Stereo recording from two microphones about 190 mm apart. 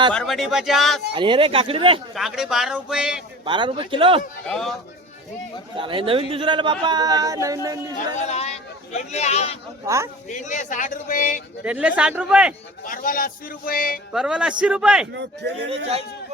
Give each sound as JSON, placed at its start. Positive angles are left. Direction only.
{"t": 0.1, "sound": "speech", "side_deg": 0}
{"t": 1.1, "sound": "speech", "side_deg": -25}
{"t": 2.1, "sound": "speech", "side_deg": 0}
{"t": 3.4, "sound": "speech", "side_deg": -25}
{"t": 4.4, "sound": "speech", "side_deg": 0}
{"t": 5.7, "sound": "speech", "side_deg": -25}
{"t": 7.9, "sound": "speech", "side_deg": 35}
{"t": 9.8, "sound": "speech", "side_deg": -15}
{"t": 10.2, "sound": "speech", "side_deg": 40}
{"t": 11.6, "sound": "speech", "side_deg": -5}
{"t": 12.8, "sound": "speech", "side_deg": 45}
{"t": 14.1, "sound": "speech", "side_deg": -5}
{"t": 15.1, "sound": "speech", "side_deg": -65}